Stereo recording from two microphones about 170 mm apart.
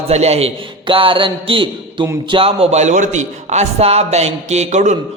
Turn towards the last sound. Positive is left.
turn(degrees=-45)  # may be behind; listen again after turning